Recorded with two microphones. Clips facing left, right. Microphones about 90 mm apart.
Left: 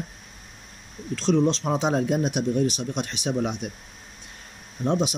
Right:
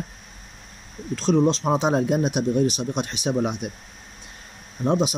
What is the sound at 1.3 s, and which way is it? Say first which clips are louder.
Speech: right 2 dB; 20° right (ahead or behind).